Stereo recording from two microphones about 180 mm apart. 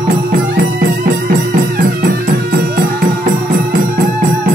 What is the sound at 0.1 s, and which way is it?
Music, 50° right (ahead or behind).